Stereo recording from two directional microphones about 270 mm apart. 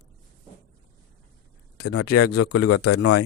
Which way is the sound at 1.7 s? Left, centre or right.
Left.